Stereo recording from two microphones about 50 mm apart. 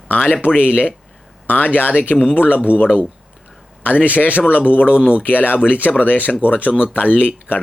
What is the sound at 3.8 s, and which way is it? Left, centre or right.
A man's voice, left.